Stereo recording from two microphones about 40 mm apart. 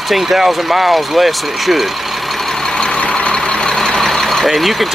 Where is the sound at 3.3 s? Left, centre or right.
Left.